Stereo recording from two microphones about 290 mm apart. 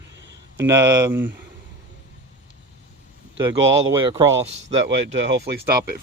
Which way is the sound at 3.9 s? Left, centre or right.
Centre.